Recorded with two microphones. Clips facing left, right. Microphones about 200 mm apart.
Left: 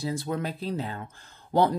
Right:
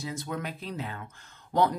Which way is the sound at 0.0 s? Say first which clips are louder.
Left 5 dB; 35° left (ahead or behind).